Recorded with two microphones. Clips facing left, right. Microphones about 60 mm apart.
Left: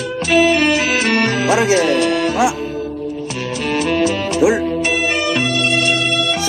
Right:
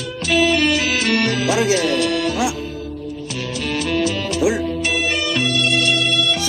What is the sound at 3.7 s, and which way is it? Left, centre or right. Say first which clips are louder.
Music: left 4 dB; left.